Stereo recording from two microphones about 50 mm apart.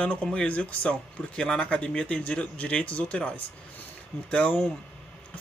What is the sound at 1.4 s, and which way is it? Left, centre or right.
Speech, centre.